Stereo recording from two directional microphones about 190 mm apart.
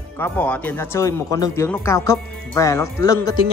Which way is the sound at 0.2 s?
10° left (ahead or behind).